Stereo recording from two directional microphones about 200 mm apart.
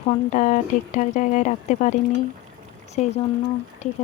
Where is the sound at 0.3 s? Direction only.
40° left (ahead or behind).